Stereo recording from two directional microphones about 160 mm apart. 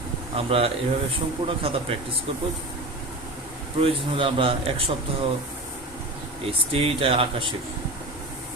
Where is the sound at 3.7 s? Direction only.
35° right (ahead or behind).